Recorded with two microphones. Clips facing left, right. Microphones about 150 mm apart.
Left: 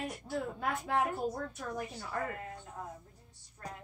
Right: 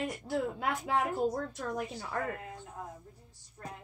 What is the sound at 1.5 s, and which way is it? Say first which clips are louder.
Speech: right 3 dB; 65° right (ahead or behind).